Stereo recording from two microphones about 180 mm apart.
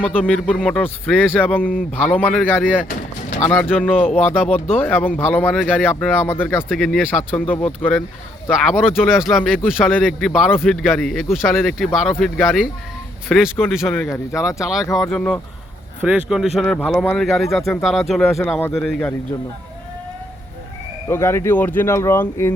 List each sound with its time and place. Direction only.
0.2 s speech: 5° left (ahead or behind)
2.9 s bird: 45° left (ahead or behind)
3.5 s speech: 5° left (ahead or behind)
4.4 s speech: 35° left (ahead or behind)
4.8 s speech: 10° left (ahead or behind)
9.0 s speech: centre (ahead or behind); by 14.5 s 15° left (ahead or behind)
14.6 s speech: centre (ahead or behind)
16.0 s speech: 10° right (ahead or behind)
21.1 s speech: 15° left (ahead or behind)